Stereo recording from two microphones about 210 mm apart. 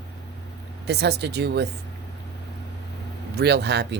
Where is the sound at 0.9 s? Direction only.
50° right (ahead or behind).